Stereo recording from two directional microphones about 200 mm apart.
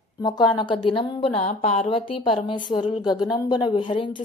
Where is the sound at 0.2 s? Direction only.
20° left (ahead or behind).